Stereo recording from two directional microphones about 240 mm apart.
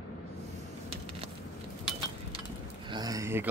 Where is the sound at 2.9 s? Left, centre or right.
Centre.